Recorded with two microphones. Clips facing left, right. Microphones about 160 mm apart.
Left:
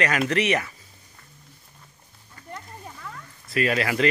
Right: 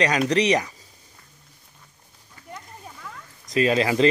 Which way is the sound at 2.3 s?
5° right (ahead or behind).